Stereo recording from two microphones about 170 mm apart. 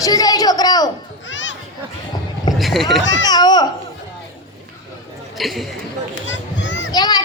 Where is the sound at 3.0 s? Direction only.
90° left.